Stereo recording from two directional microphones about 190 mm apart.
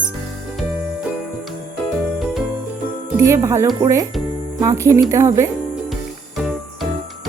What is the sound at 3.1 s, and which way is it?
Speech, 15° right (ahead or behind).